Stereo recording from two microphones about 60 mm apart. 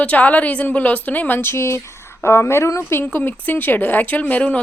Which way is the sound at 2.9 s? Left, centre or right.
Left.